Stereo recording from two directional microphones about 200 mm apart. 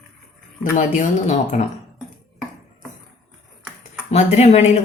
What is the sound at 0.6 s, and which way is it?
Speech, 40° left (ahead or behind).